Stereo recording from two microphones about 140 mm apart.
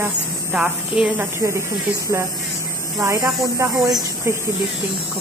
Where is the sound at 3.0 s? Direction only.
20° right (ahead or behind).